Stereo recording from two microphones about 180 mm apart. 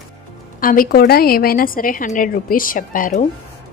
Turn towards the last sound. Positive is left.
turn(degrees=45)  # may be behind; listen again after turning